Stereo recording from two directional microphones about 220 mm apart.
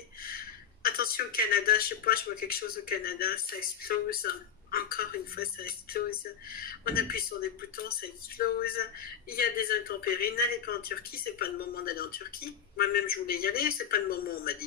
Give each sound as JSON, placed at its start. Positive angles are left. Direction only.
{"t": 0.2, "sound": "speech", "side_deg": 40}
{"t": 8.4, "sound": "speech", "side_deg": 45}